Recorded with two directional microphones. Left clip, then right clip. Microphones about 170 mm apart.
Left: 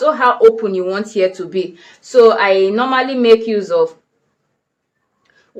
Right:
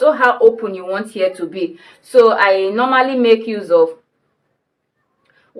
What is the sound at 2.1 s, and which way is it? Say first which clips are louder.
Speech: left 1 dB; 25° left (ahead or behind).